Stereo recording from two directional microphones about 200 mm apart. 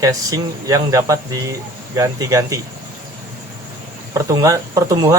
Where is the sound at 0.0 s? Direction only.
15° right (ahead or behind).